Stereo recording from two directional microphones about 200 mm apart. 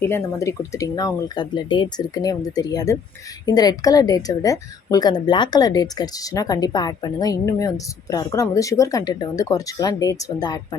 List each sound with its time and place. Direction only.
0.0 s a woman's voice: 15° left (ahead or behind)